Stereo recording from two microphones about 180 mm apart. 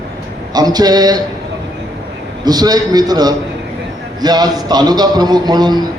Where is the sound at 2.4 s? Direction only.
20° right (ahead or behind).